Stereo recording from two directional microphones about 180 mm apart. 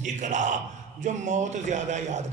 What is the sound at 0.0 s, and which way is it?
A man's voice, 45° right (ahead or behind).